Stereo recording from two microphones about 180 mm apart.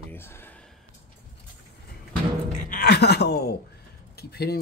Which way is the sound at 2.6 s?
60° left (ahead or behind).